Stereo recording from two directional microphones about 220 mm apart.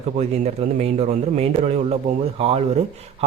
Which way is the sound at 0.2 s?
30° right (ahead or behind).